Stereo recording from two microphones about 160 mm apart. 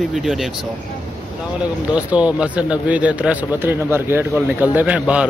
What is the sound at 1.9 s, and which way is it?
Speech, 10° right (ahead or behind).